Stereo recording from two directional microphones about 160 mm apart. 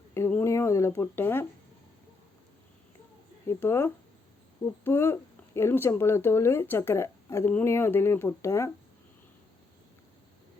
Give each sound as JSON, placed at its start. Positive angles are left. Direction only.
{"t": 0.1, "sound": "speech", "side_deg": 15}
{"t": 3.4, "sound": "speech", "side_deg": 15}